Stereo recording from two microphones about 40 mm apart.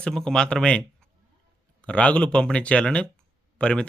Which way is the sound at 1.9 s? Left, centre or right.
Left.